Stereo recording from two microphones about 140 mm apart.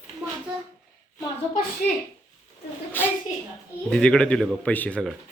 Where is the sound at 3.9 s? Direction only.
5° left (ahead or behind).